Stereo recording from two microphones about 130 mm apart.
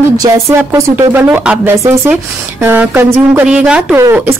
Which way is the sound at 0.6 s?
20° right (ahead or behind).